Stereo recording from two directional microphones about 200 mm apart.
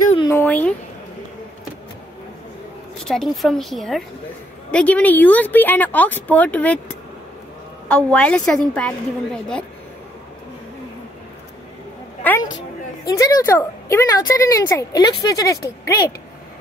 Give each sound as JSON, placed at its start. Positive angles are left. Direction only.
{"t": 0.2, "sound": "speech", "side_deg": 10}
{"t": 3.0, "sound": "a woman's voice", "side_deg": 0}
{"t": 12.2, "sound": "a woman's voice", "side_deg": 10}